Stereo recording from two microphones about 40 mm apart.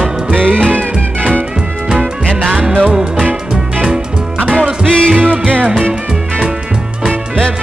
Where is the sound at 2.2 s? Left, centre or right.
Centre.